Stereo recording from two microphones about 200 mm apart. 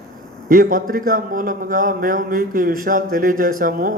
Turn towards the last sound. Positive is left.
turn(degrees=-45)  # may be behind; listen again after turning